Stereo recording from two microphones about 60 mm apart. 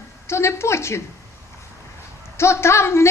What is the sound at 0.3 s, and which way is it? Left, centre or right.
Speech, left.